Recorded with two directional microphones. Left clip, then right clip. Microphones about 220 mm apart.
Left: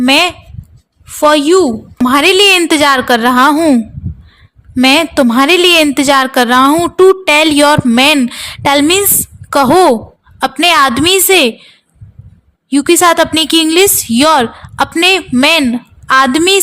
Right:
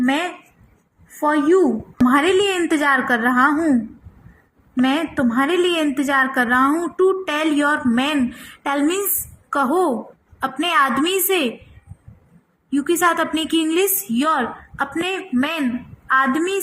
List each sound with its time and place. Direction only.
0.0 s a woman's voice: 55° left (ahead or behind)
4.8 s a woman's voice: 50° left (ahead or behind)
12.7 s a woman's voice: 45° left (ahead or behind)